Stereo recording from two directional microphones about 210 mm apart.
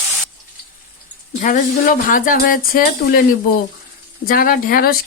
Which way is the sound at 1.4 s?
40° left (ahead or behind).